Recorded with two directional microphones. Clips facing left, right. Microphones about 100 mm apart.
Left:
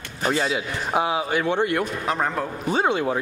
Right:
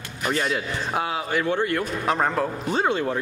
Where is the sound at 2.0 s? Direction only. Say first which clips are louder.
Right 2 dB; centre (ahead or behind).